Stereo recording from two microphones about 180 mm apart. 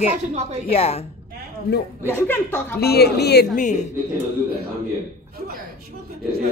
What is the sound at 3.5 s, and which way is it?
Speech, 40° left (ahead or behind).